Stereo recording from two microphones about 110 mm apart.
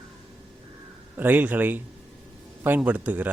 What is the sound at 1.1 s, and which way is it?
A man's voice, 15° right (ahead or behind).